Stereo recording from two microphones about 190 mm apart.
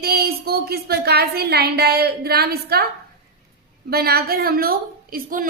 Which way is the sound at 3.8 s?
55° right (ahead or behind).